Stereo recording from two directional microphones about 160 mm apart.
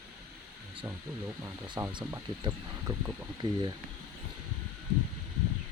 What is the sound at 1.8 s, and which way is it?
Speech, 15° right (ahead or behind).